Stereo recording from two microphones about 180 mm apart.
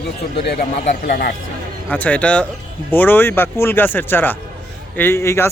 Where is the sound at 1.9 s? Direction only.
10° left (ahead or behind).